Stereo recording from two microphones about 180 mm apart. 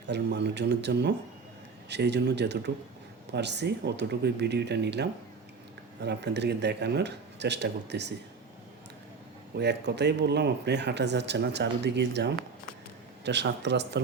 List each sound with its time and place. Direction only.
0.1 s speech: 70° right (ahead or behind)
9.6 s speech: 70° right (ahead or behind)